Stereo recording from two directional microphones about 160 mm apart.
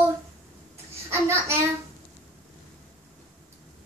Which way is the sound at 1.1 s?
15° right (ahead or behind).